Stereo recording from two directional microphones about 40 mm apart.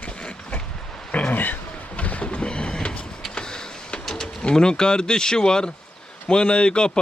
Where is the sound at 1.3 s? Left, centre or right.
Left.